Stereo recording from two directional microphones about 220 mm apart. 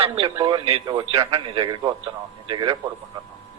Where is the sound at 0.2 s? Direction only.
20° right (ahead or behind).